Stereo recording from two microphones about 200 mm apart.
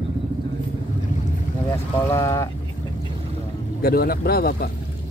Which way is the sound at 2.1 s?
15° left (ahead or behind).